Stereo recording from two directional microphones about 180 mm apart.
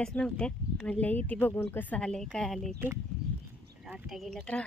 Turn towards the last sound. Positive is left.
turn(degrees=5)  # may be behind; listen again after turning